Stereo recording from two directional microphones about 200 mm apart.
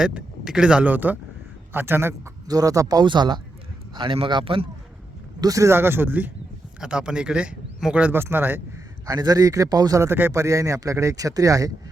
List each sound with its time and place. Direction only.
0.0 s a man's voice: 5° right (ahead or behind)